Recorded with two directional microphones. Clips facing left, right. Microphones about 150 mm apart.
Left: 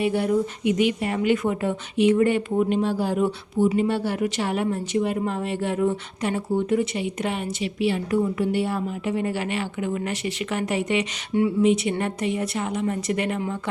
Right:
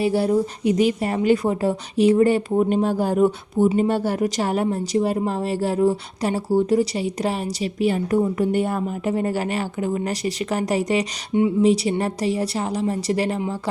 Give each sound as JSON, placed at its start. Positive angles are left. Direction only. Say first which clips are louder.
{"t": 0.0, "sound": "a woman's voice", "louder": "right 3 dB", "side_deg": -35}